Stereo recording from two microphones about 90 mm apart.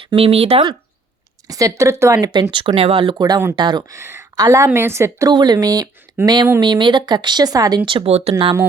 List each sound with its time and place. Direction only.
0.2 s speech: 90° right
1.5 s a woman's voice: 40° right (ahead or behind)
2.2 s speech: 55° right (ahead or behind); by 3.2 s 75° right (ahead or behind)
3.2 s speech: 45° right (ahead or behind)
3.9 s a woman's voice: 30° right (ahead or behind)
5.3 s speech: 50° right (ahead or behind)
7.9 s speech: 75° right (ahead or behind)